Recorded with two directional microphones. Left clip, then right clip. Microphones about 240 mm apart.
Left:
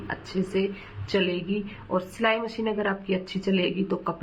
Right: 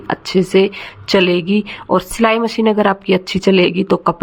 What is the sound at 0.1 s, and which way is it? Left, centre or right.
Speech, right.